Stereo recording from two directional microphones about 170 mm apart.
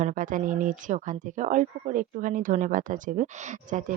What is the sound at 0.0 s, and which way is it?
Speech, 50° right (ahead or behind).